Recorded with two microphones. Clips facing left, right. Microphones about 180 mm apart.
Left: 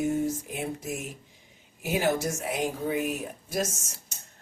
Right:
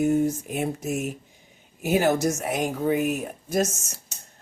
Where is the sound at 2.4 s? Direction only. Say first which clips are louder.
Right 3 dB; 75° right (ahead or behind).